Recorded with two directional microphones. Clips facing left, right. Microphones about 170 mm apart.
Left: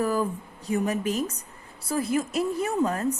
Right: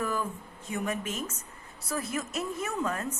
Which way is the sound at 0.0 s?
35° left (ahead or behind).